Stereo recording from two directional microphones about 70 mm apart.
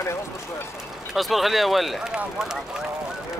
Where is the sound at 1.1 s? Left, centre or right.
Centre.